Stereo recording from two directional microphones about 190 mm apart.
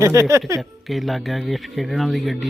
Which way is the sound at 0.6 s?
Centre (ahead or behind).